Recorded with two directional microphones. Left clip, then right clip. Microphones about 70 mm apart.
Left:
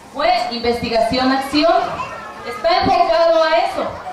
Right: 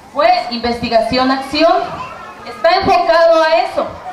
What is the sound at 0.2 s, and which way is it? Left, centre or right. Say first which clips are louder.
Speech: right 4 dB; right.